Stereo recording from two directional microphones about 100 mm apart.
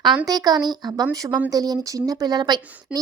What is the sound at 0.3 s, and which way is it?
A woman's voice, 40° right (ahead or behind).